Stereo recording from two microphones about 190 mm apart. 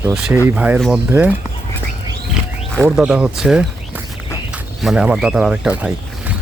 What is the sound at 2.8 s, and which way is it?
Speech, 5° right (ahead or behind).